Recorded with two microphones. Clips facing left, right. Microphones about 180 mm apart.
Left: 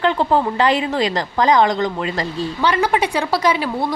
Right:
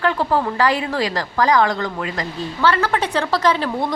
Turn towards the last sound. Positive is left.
turn(degrees=10)  # may be behind; listen again after turning